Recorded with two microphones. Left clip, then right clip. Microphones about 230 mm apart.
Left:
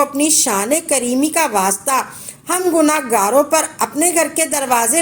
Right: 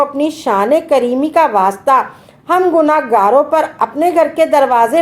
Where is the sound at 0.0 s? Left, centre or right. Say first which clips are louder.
Right 1 dB; left.